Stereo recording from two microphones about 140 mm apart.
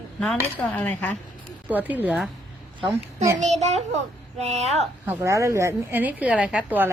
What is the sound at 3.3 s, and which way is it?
A child's voice, 55° right (ahead or behind).